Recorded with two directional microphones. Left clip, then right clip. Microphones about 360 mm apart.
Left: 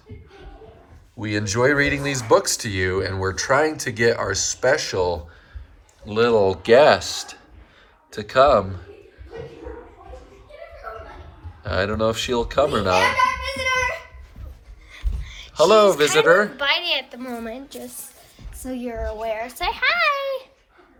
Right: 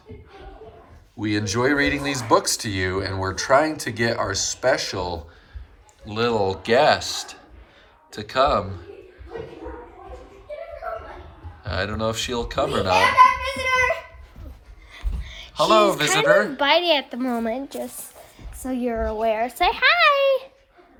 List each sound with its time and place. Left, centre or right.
1.2 s speech: centre
11.6 s speech: centre
13.6 s a sound: centre
14.9 s a sound: centre
15.5 s speech: centre
16.6 s a child's voice: centre